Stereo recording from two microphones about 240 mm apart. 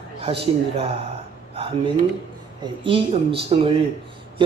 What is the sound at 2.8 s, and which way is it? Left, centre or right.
Speech, right.